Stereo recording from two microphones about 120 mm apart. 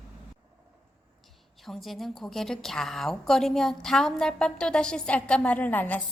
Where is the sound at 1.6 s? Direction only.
Centre (ahead or behind).